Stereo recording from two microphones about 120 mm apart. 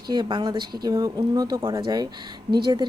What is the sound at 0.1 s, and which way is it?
Speech, 40° right (ahead or behind).